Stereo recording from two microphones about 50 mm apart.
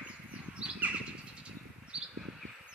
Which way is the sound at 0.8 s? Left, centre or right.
Right.